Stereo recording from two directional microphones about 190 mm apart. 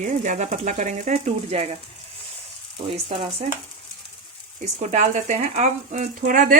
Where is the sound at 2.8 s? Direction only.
30° right (ahead or behind).